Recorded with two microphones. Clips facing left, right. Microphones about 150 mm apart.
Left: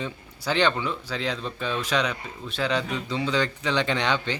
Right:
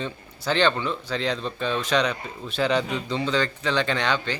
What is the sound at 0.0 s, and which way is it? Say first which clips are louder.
Speech: right 1 dB; 10° left (ahead or behind).